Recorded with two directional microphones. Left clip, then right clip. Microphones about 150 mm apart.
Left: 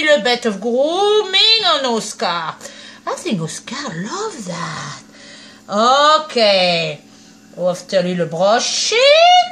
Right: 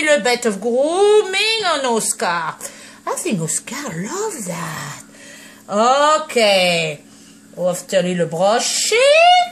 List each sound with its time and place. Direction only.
0.0 s a woman's voice: 25° right (ahead or behind)
7.6 s speech: 15° right (ahead or behind)